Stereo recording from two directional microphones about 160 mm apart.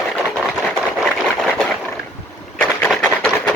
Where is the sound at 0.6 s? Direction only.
Centre (ahead or behind).